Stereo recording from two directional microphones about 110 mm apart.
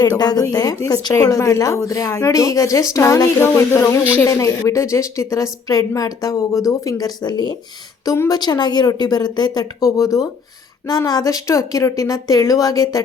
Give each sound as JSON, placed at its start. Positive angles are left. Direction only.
{"t": 0.2, "sound": "a woman's voice", "side_deg": 35}